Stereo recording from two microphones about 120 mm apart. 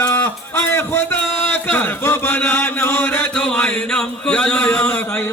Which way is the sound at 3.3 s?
5° left (ahead or behind).